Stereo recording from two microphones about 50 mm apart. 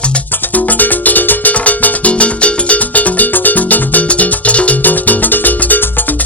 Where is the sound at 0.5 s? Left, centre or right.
Left.